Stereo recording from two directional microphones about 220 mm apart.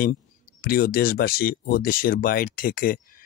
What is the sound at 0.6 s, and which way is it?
Speech, 40° left (ahead or behind).